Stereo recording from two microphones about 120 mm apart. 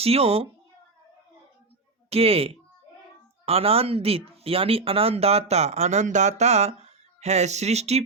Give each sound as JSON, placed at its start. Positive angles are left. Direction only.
{"t": 0.0, "sound": "speech", "side_deg": -55}
{"t": 2.0, "sound": "speech", "side_deg": -55}